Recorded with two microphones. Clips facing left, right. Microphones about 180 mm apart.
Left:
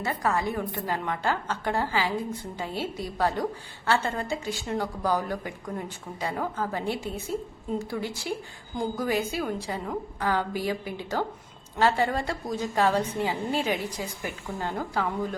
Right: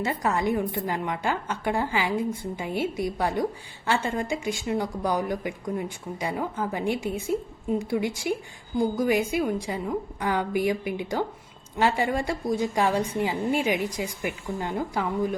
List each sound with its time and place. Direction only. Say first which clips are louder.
0.2 s a woman's voice: right 2 dB; 20° right (ahead or behind)